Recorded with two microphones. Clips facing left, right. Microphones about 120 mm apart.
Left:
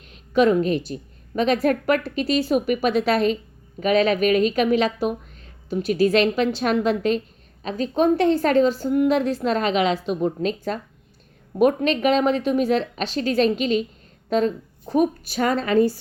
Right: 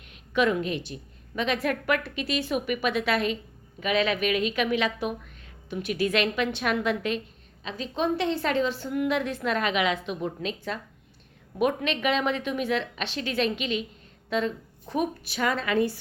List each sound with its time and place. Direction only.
0.1 s a woman's voice: 35° left (ahead or behind)